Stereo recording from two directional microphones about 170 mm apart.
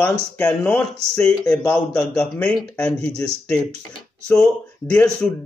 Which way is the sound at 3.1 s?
20° left (ahead or behind).